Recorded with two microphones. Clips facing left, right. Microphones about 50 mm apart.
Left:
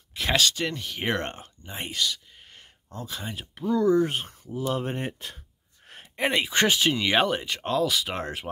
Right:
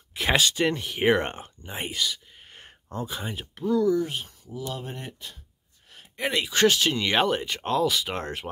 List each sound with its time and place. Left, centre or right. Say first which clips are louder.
0.1 s speech: right 1 dB; centre
2.6 s a sound: right 6 dB; right
3.1 s speech: right 2 dB; centre
3.8 s speech: left 2 dB; left
6.1 s speech: left 2 dB; left; by 8.5 s centre